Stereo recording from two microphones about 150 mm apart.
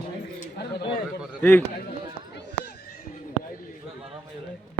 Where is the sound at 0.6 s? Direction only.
90° left.